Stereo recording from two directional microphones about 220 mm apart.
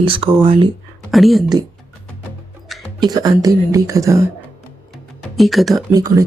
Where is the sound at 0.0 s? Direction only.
25° right (ahead or behind).